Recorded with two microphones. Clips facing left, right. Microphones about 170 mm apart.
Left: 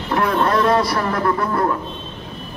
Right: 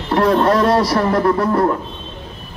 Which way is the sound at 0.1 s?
40° right (ahead or behind).